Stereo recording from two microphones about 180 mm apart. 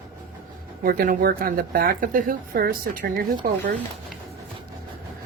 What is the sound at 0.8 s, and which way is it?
Speech, 55° right (ahead or behind).